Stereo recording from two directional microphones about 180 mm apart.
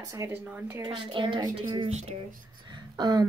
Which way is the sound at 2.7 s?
25° right (ahead or behind).